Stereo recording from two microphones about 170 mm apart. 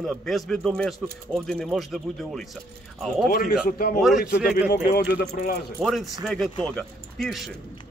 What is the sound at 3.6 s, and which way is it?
Speech, 60° left (ahead or behind).